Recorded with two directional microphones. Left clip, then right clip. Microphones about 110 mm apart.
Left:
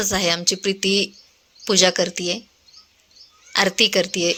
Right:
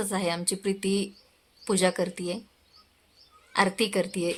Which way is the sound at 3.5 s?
15° left (ahead or behind).